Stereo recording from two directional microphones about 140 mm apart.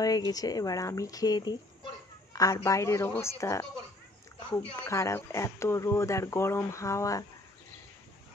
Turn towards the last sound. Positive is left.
turn(degrees=20)  # may be behind; listen again after turning